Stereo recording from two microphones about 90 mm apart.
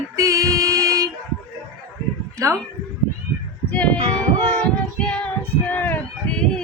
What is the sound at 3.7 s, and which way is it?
Child singing, 15° left (ahead or behind).